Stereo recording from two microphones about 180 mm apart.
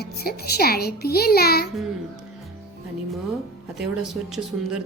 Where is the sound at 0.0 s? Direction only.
60° left (ahead or behind).